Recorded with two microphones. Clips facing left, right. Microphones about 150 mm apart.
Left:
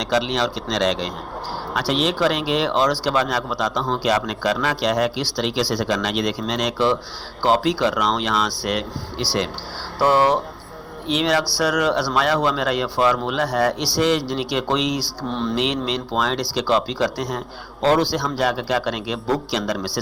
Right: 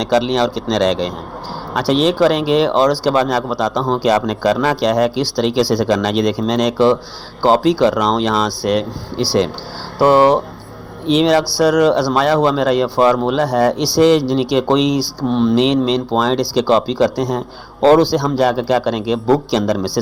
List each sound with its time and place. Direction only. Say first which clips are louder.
0.0 s speech: right 6 dB; 35° right (ahead or behind)
10.0 s a man's voice: right 6 dB; 20° right (ahead or behind)
15.3 s speech: right 10 dB; 15° right (ahead or behind)
15.5 s a man's voice: right 9 dB; 30° right (ahead or behind)